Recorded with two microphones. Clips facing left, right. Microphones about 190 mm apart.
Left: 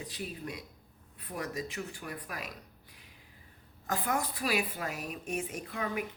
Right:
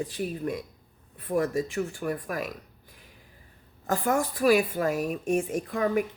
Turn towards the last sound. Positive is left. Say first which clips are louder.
# right 9 dB
turn(degrees=-45)  # may be behind; listen again after turning